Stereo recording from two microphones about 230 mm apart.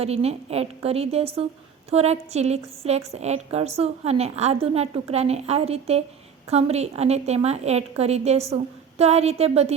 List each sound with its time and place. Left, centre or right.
0.0 s a woman's voice: right